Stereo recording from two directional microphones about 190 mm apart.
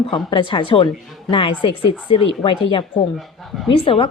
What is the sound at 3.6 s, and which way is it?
Speech, 30° left (ahead or behind).